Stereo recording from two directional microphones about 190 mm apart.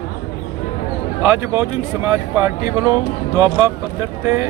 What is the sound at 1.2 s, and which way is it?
Speech, 15° right (ahead or behind).